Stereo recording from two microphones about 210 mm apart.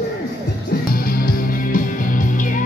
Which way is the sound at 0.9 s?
45° left (ahead or behind).